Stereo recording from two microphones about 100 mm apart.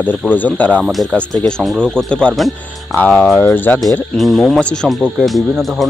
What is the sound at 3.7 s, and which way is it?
Speech, 20° left (ahead or behind).